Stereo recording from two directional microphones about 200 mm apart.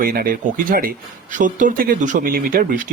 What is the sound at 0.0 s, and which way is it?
Speech, 45° right (ahead or behind).